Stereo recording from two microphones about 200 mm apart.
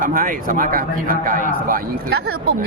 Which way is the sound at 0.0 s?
45° right (ahead or behind).